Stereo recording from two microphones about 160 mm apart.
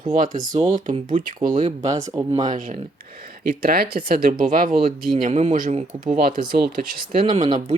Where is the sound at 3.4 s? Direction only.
70° right (ahead or behind); by 5.8 s 55° right (ahead or behind).